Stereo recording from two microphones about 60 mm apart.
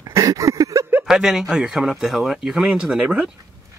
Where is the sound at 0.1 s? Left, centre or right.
Right.